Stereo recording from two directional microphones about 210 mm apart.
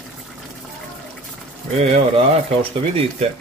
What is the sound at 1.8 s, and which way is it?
Speech, 30° right (ahead or behind).